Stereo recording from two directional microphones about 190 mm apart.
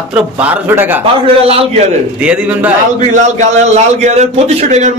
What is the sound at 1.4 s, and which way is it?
Speech, 30° right (ahead or behind).